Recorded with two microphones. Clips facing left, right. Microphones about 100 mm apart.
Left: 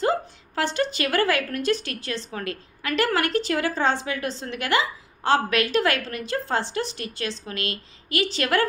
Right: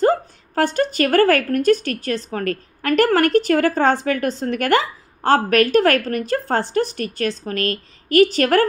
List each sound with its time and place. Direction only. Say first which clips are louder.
0.0 s a woman's voice: right 6 dB; 45° right (ahead or behind)